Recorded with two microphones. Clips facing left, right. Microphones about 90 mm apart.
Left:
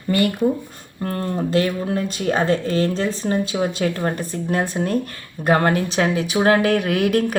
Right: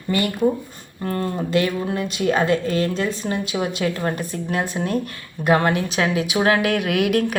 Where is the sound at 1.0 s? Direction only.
40° left (ahead or behind).